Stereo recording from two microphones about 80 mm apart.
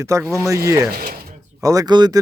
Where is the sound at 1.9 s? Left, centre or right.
Right.